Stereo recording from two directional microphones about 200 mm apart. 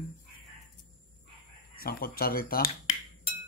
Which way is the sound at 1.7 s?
50° left (ahead or behind).